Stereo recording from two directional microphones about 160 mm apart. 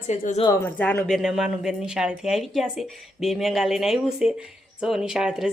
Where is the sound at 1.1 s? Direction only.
5° right (ahead or behind).